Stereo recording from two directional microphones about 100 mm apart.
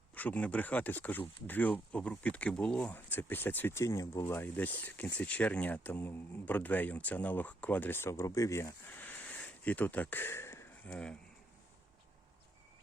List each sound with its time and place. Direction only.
0.1 s speech: 15° left (ahead or behind)
2.9 s speech: 20° left (ahead or behind)
8.9 s a sound: 15° left (ahead or behind)
10.8 s speech: 10° left (ahead or behind)